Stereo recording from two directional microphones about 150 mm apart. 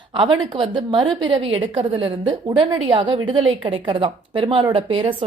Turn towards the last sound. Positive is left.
turn(degrees=-40)  # may be behind; listen again after turning